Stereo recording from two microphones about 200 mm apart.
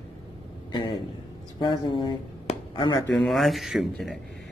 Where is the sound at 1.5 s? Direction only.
25° left (ahead or behind).